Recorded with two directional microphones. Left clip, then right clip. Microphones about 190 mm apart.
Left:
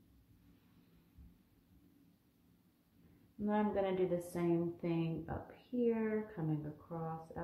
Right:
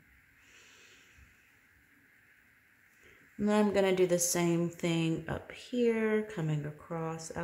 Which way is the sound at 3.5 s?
40° right (ahead or behind).